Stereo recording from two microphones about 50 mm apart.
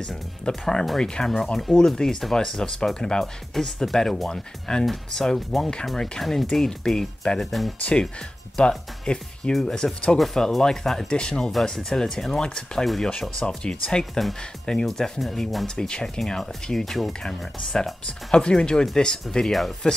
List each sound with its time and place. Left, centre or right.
0.5 s speech: centre
7.8 s speech: centre
13.2 s speech: centre
14.2 s speech: centre
14.9 s speech: centre